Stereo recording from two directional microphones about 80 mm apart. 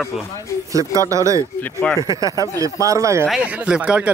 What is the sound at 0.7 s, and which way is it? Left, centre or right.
Speech, right.